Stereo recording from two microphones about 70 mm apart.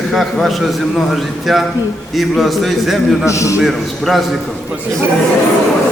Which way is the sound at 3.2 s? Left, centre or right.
Left.